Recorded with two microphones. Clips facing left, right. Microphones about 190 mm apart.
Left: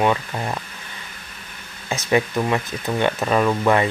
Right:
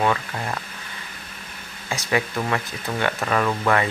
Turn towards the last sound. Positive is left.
turn(degrees=15)  # may be behind; listen again after turning